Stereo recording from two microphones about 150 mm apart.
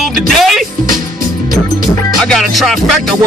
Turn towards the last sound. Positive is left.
turn(degrees=0)  # may be behind; listen again after turning